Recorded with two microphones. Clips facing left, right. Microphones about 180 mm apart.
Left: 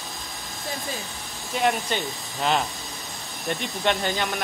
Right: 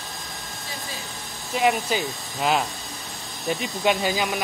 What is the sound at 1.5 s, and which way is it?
Speech, 5° right (ahead or behind).